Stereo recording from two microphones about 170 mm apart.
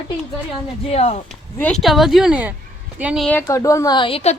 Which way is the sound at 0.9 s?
35° left (ahead or behind).